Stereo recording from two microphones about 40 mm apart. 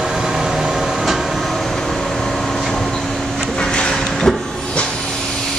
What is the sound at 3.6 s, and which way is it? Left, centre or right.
Vehicle, left.